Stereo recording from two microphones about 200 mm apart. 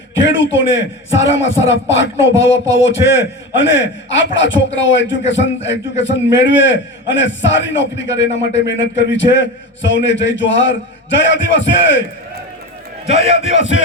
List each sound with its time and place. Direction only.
0.1 s a man's voice: 65° left (ahead or behind)
13.1 s a man's voice: 65° left (ahead or behind)